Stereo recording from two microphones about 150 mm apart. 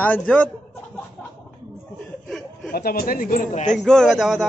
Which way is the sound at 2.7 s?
80° left.